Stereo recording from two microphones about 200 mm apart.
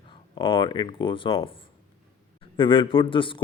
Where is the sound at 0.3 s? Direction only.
25° left (ahead or behind).